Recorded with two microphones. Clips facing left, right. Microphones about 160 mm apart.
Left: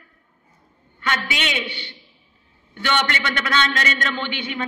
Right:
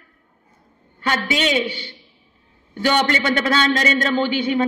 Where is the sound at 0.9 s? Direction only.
40° right (ahead or behind).